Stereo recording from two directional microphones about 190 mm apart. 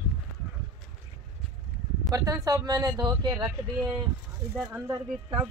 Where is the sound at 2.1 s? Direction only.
20° right (ahead or behind).